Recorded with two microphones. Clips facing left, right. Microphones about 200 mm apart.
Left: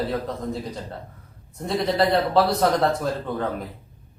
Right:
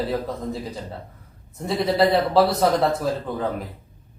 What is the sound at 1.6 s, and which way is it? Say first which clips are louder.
Speech: right 2 dB; 5° right (ahead or behind).